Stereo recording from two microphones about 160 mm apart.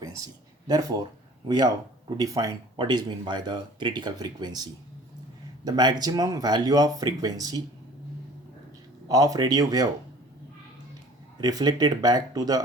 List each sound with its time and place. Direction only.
0.7 s speech: 25° right (ahead or behind)
9.0 s speech: 20° right (ahead or behind)
11.3 s speech: 25° right (ahead or behind)